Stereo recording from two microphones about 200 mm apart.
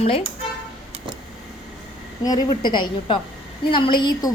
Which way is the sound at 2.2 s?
20° left (ahead or behind).